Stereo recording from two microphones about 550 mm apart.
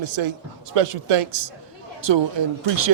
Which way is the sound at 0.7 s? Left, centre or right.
Right.